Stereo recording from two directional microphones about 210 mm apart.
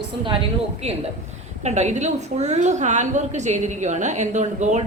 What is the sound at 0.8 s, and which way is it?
A woman's voice, 30° right (ahead or behind).